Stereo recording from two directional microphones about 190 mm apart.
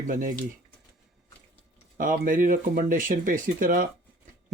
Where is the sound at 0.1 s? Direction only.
45° right (ahead or behind).